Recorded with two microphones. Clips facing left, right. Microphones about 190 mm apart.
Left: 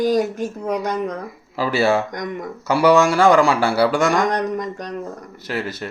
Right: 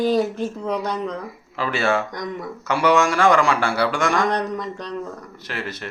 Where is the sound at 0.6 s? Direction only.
45° left (ahead or behind).